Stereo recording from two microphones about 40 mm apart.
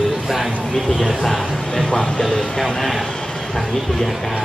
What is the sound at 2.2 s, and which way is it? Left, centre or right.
Speech, centre.